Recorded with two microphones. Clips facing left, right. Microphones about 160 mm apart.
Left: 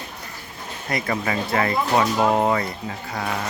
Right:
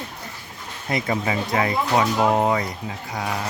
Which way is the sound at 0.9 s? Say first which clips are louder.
Right 1 dB; 20° right (ahead or behind).